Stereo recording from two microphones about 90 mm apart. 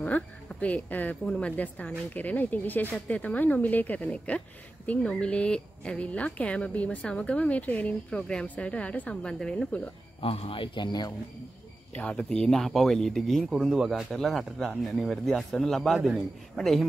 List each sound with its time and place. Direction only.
0.0 s speech: 15° left (ahead or behind)
10.2 s speech: 85° left; by 11.1 s 50° left (ahead or behind)
11.9 s speech: 15° left (ahead or behind)